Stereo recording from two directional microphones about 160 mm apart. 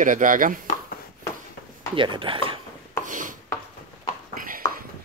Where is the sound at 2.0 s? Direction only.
30° right (ahead or behind).